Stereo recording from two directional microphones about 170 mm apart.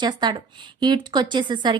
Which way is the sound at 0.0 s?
25° right (ahead or behind).